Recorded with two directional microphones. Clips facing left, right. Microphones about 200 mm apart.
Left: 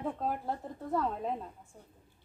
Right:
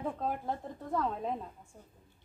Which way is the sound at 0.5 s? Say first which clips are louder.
Left 1 dB; 5° left (ahead or behind).